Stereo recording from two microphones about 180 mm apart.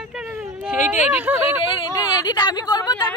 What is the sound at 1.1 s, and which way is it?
Speech, 10° right (ahead or behind).